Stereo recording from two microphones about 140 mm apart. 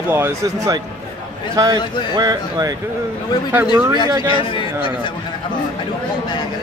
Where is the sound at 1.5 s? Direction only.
30° right (ahead or behind).